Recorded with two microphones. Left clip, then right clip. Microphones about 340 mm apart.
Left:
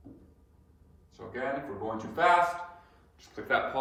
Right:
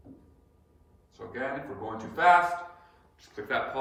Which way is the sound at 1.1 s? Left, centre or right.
Centre.